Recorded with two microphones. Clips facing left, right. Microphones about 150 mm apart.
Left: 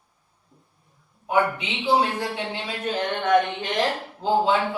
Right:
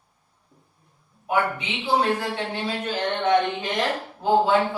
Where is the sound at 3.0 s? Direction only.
30° right (ahead or behind).